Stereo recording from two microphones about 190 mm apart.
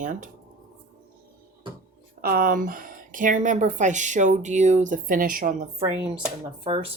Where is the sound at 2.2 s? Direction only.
50° right (ahead or behind).